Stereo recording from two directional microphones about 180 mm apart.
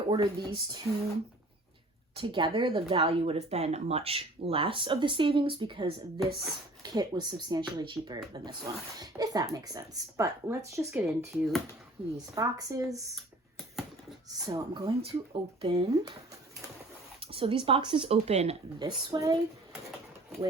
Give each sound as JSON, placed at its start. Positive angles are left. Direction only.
{"t": 0.1, "sound": "speech", "side_deg": -20}
{"t": 2.1, "sound": "speech", "side_deg": -25}
{"t": 10.9, "sound": "speech", "side_deg": 0}
{"t": 12.3, "sound": "speech", "side_deg": -20}
{"t": 14.4, "sound": "speech", "side_deg": -20}
{"t": 17.2, "sound": "speech", "side_deg": -30}
{"t": 18.8, "sound": "speech", "side_deg": -25}